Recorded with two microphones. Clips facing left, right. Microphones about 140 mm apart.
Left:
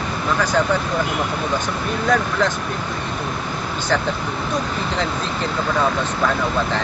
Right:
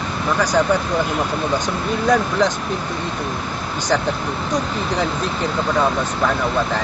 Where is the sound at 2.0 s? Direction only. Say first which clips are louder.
Right 2 dB; 15° right (ahead or behind).